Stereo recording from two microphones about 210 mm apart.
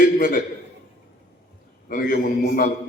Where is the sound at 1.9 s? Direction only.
40° left (ahead or behind).